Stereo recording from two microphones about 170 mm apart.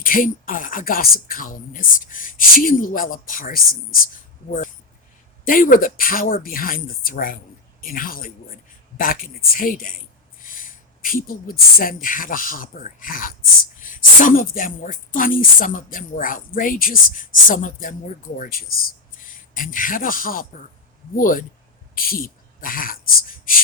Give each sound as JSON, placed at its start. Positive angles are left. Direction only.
{"t": 0.0, "sound": "speech", "side_deg": 55}